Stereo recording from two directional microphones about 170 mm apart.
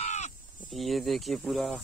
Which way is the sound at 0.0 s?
40° left (ahead or behind).